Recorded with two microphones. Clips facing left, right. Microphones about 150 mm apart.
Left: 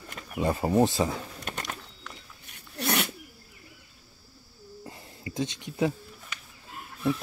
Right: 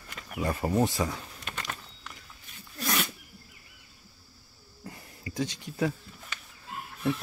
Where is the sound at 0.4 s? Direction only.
25° left (ahead or behind).